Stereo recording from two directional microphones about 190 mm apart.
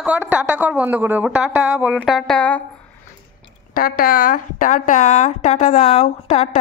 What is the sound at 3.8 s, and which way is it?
A woman's voice, 50° left (ahead or behind).